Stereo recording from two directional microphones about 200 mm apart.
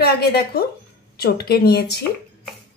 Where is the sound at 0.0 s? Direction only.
50° left (ahead or behind).